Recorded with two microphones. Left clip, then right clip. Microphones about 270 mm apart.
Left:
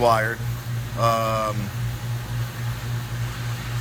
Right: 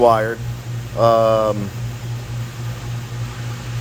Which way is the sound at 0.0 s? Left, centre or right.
Centre.